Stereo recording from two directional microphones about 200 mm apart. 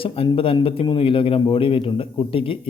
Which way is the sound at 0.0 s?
30° left (ahead or behind).